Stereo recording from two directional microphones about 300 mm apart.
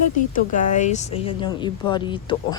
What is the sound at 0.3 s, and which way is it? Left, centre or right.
Speech, left.